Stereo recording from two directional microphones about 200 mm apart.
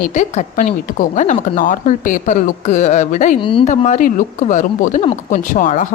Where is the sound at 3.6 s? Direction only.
35° left (ahead or behind).